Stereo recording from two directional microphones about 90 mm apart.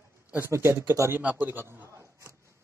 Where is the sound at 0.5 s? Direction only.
30° right (ahead or behind).